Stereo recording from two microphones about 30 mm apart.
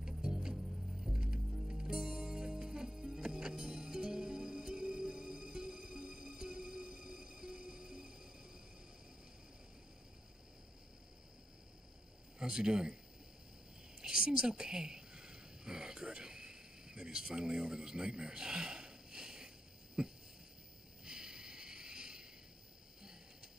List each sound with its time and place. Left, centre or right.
0.0 s music: right
0.6 s music: centre
1.7 s music: right
12.4 s speech: right
14.0 s a sound: right
17.2 s a man's voice: right
20.0 s a sound: right